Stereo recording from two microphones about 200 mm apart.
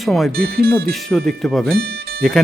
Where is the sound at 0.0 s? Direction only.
Centre (ahead or behind).